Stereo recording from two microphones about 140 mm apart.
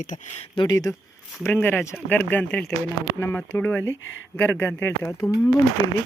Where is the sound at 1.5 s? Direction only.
15° left (ahead or behind).